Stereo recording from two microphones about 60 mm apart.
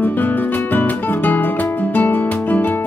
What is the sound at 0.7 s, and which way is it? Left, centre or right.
Music, left.